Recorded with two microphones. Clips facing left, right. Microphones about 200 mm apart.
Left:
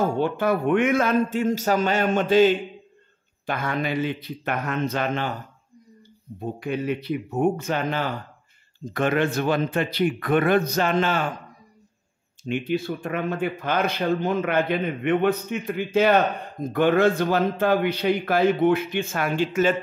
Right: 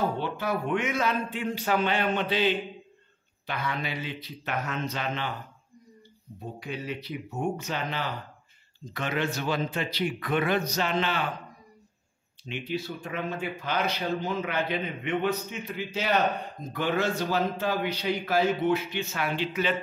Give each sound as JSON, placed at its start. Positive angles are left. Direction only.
{"t": 0.0, "sound": "speech", "side_deg": 50}
{"t": 6.6, "sound": "a man's voice", "side_deg": 55}
{"t": 12.4, "sound": "a man's voice", "side_deg": 50}